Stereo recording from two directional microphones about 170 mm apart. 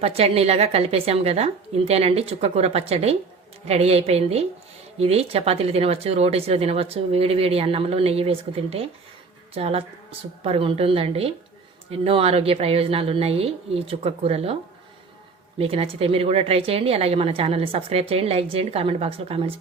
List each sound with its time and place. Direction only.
0.0 s speech: 35° right (ahead or behind)